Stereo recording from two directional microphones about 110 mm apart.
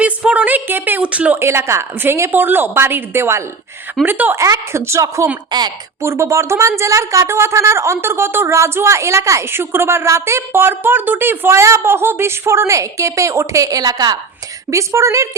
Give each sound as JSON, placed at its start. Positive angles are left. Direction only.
{"t": 0.0, "sound": "a sound", "side_deg": -10}
{"t": 1.4, "sound": "a woman's voice", "side_deg": -25}
{"t": 5.5, "sound": "a woman's voice", "side_deg": -40}
{"t": 6.0, "sound": "a woman's voice", "side_deg": -25}